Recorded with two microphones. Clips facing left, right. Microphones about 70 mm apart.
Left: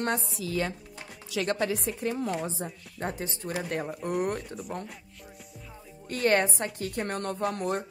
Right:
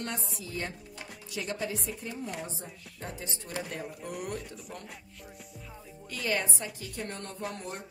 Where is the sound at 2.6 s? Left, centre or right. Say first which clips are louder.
Left 8 dB; left.